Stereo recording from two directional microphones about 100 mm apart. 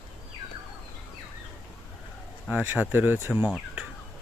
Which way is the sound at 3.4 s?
10° right (ahead or behind).